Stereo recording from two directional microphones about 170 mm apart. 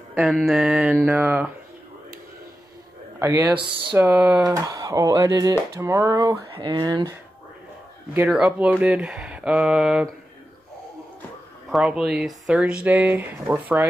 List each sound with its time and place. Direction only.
0.1 s speech: centre (ahead or behind)
3.2 s speech: 15° right (ahead or behind)
8.3 s speech: 5° right (ahead or behind)
11.7 s speech: centre (ahead or behind)